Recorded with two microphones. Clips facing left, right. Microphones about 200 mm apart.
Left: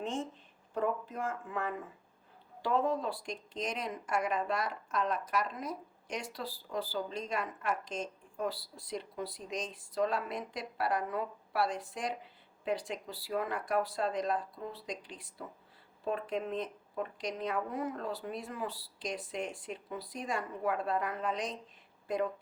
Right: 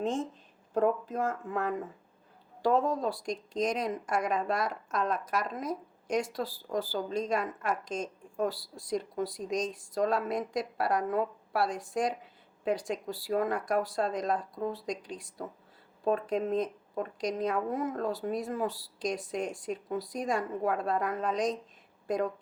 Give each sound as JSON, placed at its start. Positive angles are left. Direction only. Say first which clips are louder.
{"t": 0.7, "sound": "a woman's voice", "louder": "right 6 dB", "side_deg": -40}